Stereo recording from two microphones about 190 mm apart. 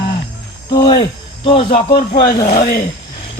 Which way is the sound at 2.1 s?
20° left (ahead or behind).